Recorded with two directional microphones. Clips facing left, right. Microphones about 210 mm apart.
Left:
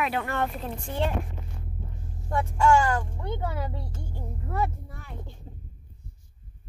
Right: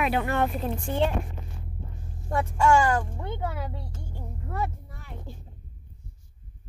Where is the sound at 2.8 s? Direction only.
5° right (ahead or behind).